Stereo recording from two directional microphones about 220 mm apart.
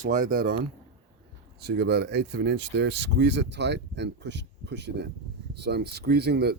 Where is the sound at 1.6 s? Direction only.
50° right (ahead or behind).